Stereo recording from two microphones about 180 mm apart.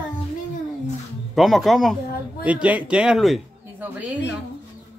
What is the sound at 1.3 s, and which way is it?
Speech, centre (ahead or behind).